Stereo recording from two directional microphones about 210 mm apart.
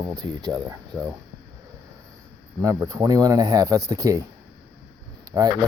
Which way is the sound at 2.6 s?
15° right (ahead or behind).